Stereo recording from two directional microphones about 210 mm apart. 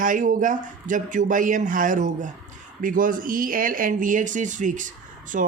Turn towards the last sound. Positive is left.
turn(degrees=-40)  # may be behind; listen again after turning